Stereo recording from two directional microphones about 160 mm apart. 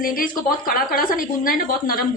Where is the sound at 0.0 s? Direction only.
65° left (ahead or behind).